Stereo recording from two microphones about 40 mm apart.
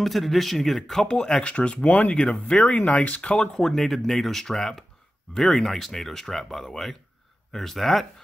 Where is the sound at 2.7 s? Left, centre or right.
Left.